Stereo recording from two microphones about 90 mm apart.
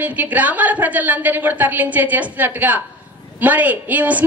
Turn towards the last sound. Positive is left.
turn(degrees=-15)  # may be behind; listen again after turning